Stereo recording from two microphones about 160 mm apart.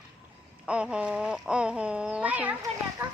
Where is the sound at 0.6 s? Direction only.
5° right (ahead or behind).